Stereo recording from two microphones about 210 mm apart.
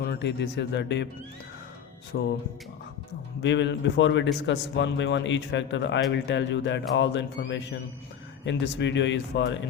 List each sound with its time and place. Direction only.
0.0 s speech: 50° left (ahead or behind)
2.1 s music: 50° left (ahead or behind)
3.4 s speech: 55° left (ahead or behind)